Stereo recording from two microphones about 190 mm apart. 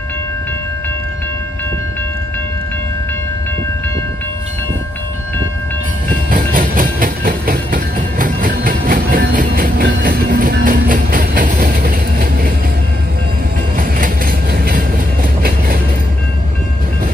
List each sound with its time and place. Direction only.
6.0 s train: 45° right (ahead or behind)
13.7 s train: 45° right (ahead or behind)